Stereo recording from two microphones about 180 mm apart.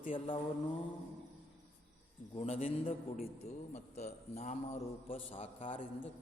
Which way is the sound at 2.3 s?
35° left (ahead or behind).